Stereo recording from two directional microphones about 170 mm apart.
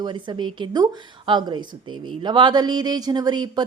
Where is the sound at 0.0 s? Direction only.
25° right (ahead or behind).